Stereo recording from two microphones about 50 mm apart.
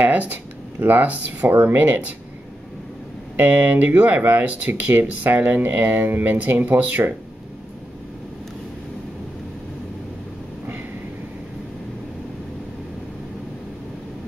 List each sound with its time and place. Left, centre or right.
0.0 s speech: right
3.3 s speech: right